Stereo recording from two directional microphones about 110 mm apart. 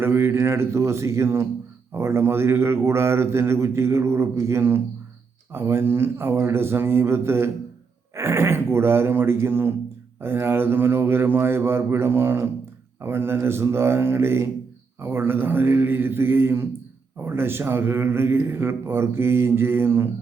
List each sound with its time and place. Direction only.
0.0 s speech: 20° right (ahead or behind)